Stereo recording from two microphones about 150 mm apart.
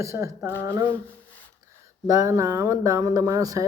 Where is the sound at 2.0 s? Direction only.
20° right (ahead or behind).